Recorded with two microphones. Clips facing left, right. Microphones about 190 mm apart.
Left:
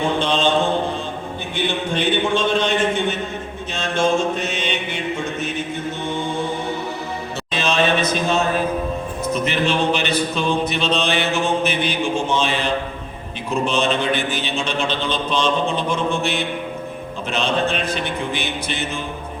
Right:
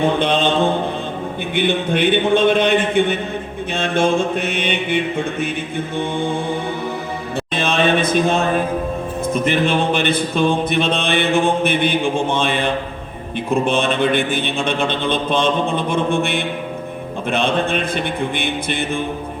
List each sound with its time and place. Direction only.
0.2 s speech: 60° right (ahead or behind)
1.5 s speech: 55° right (ahead or behind)
7.5 s a sound: 55° right (ahead or behind)
9.2 s music: 50° right (ahead or behind)
13.5 s speech: 55° right (ahead or behind)